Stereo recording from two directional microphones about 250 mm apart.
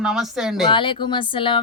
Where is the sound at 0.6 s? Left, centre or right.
Centre.